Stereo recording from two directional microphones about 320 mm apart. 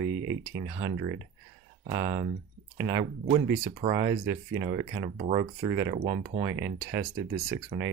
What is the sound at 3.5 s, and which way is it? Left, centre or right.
Speech, centre.